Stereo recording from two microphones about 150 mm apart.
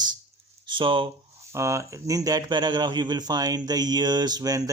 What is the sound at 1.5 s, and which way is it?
A man's voice, 20° right (ahead or behind).